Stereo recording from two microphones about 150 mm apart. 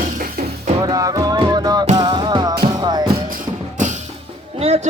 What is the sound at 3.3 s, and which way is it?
Music, 60° right (ahead or behind).